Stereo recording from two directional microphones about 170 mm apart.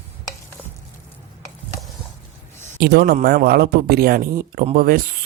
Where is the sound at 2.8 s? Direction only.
70° right (ahead or behind).